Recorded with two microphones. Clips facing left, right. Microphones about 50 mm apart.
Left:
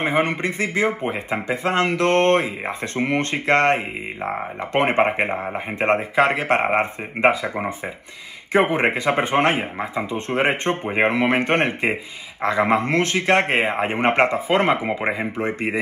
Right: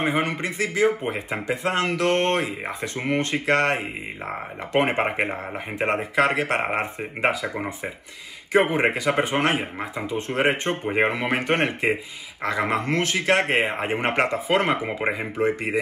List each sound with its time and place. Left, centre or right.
0.0 s speech: left
5.8 s speech: left